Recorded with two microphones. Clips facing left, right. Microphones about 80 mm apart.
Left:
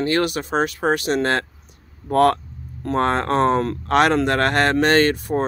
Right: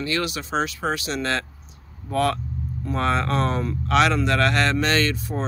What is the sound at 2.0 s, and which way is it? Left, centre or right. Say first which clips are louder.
Vehicle: left 6 dB; left.